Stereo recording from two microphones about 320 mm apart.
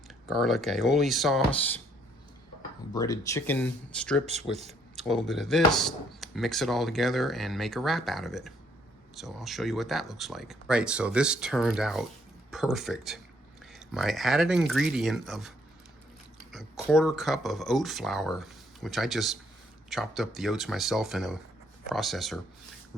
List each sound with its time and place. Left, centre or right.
0.3 s speech: centre
2.9 s speech: centre
4.5 s a sound: centre
5.0 s speech: centre